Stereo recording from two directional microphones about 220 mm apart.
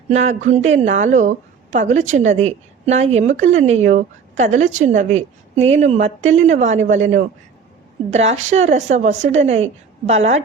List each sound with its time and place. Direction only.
0.1 s a woman's voice: 30° right (ahead or behind)
8.1 s a woman's voice: 30° right (ahead or behind)